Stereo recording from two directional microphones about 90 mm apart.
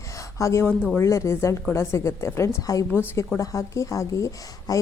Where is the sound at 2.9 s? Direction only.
25° left (ahead or behind).